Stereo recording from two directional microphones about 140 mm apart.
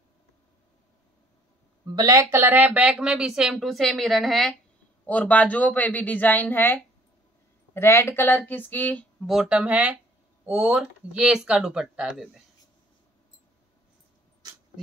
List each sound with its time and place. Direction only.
2.0 s a woman's voice: 25° right (ahead or behind)
2.3 s a woman's voice: 15° right (ahead or behind); by 9.0 s 10° left (ahead or behind)
9.2 s speech: 5° right (ahead or behind)